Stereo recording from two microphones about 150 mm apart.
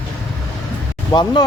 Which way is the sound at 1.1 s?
30° left (ahead or behind).